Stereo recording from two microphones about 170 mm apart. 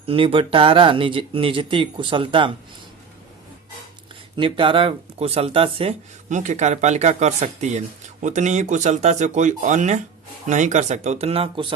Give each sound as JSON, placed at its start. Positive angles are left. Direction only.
{"t": 0.0, "sound": "speech", "side_deg": -35}
{"t": 4.4, "sound": "speech", "side_deg": -30}